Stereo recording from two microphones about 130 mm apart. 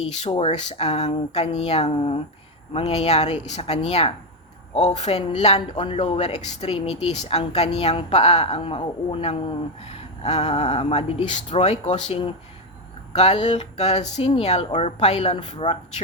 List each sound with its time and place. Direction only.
0.0 s speech: 60° left (ahead or behind)